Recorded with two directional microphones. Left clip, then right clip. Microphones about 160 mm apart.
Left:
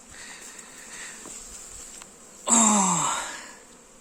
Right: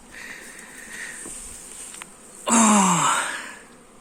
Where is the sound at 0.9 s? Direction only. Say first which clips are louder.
Right 6 dB; 30° left (ahead or behind).